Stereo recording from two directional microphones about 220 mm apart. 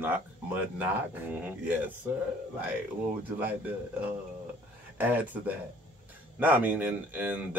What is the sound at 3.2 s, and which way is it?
Speech, 5° right (ahead or behind).